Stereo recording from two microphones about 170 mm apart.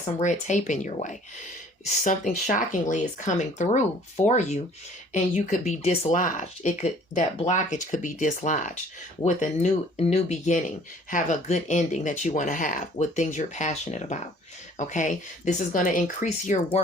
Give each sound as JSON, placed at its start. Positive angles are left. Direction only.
{"t": 0.2, "sound": "speech", "side_deg": 45}
{"t": 4.3, "sound": "rub", "side_deg": 40}
{"t": 5.1, "sound": "speech", "side_deg": 45}